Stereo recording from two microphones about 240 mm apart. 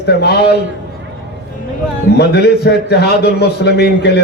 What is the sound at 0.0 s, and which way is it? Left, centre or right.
Speech, left.